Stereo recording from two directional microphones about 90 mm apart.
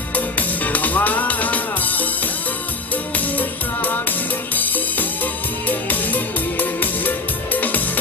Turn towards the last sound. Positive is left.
turn(degrees=20)  # may be behind; listen again after turning